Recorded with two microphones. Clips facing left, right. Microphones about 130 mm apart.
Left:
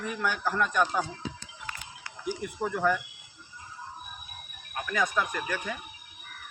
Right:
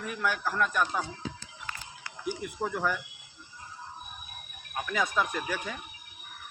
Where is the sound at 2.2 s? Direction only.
Centre (ahead or behind).